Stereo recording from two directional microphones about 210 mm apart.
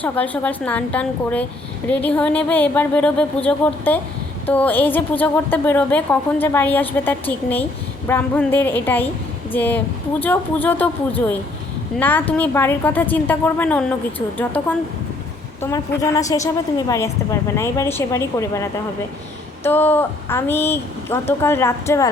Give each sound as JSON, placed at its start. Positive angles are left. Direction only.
{"t": 0.0, "sound": "a woman's voice", "side_deg": 5}
{"t": 11.9, "sound": "a woman's voice", "side_deg": 10}